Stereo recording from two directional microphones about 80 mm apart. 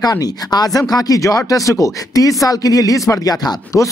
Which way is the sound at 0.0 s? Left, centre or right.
Left.